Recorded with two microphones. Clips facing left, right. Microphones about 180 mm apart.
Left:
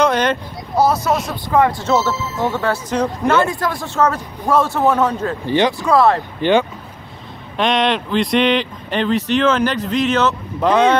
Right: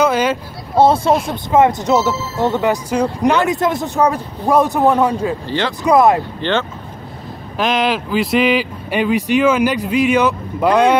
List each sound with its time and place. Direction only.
0.0 s speech: 5° right (ahead or behind)
0.7 s speech: 25° right (ahead or behind); by 5.3 s 10° right (ahead or behind)
5.5 s speech: 15° left (ahead or behind)
5.8 s speech: 20° right (ahead or behind)
7.5 s speech: 5° right (ahead or behind)